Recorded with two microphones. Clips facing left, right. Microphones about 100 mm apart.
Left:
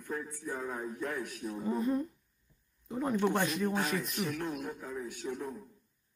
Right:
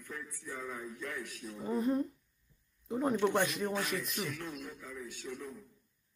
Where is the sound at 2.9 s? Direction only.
15° right (ahead or behind).